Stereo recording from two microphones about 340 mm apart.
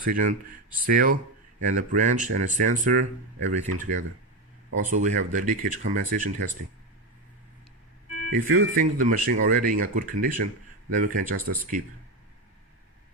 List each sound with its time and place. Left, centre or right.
0.0 s speech: right
4.7 s speech: right
8.4 s speech: right